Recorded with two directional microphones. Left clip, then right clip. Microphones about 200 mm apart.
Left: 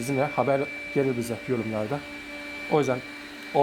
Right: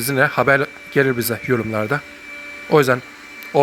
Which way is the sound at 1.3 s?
40° right (ahead or behind).